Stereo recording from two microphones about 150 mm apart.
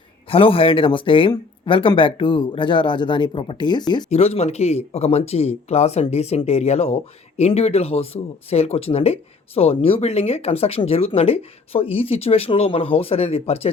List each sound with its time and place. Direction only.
0.3 s speech: 40° left (ahead or behind)
4.1 s speech: 45° left (ahead or behind)